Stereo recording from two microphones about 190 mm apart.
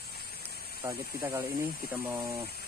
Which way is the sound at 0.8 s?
15° right (ahead or behind).